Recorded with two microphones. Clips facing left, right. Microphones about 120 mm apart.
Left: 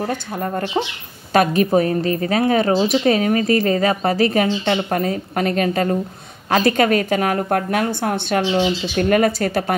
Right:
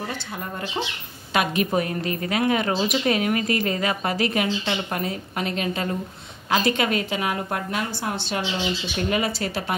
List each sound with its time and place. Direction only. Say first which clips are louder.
0.0 s a woman's voice: left 8 dB; 50° left (ahead or behind)